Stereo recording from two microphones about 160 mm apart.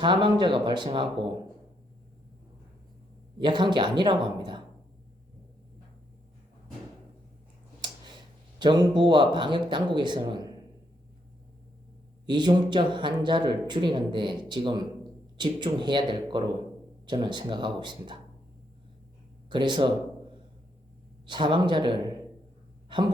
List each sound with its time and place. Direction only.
0.0 s speech: 30° right (ahead or behind)
3.3 s speech: 30° right (ahead or behind)
8.5 s speech: 30° right (ahead or behind)
12.2 s speech: 30° right (ahead or behind)
19.5 s speech: 30° right (ahead or behind)
21.2 s speech: 30° right (ahead or behind)